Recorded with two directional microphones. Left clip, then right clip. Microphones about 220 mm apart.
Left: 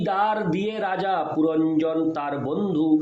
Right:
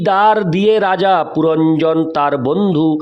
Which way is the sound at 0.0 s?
50° right (ahead or behind).